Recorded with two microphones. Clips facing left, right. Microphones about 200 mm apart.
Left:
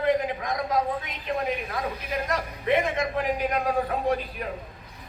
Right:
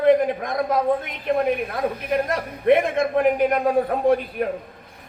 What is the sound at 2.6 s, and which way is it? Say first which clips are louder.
A man's voice: right 7 dB; 55° right (ahead or behind).